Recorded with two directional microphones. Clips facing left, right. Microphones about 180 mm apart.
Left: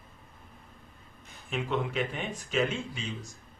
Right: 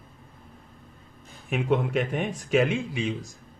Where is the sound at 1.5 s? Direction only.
60° right (ahead or behind).